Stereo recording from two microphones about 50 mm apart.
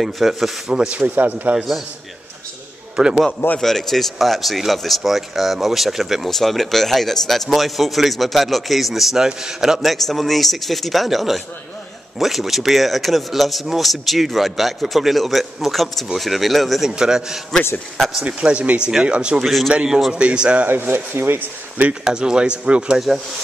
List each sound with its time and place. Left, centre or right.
0.0 s speech: centre
0.7 s speech: right
3.0 s speech: centre
3.6 s speech: centre
17.0 s speech: centre
17.9 s speech: centre
18.2 s speech: right
19.4 s speech: centre
20.1 s speech: centre
20.6 s speech: right
22.0 s speech: centre
22.9 s speech: centre